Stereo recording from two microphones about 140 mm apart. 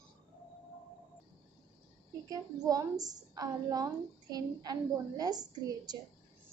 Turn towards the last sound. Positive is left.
turn(degrees=-30)  # may be behind; listen again after turning